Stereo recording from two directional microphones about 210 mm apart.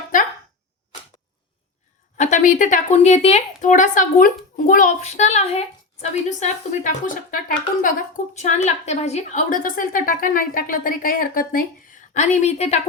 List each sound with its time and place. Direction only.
2.1 s a woman's voice: 35° left (ahead or behind)